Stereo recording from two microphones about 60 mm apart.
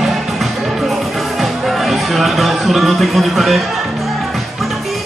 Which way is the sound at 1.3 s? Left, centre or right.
Centre.